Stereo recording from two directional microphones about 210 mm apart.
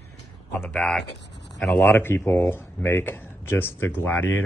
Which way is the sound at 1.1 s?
55° left (ahead or behind).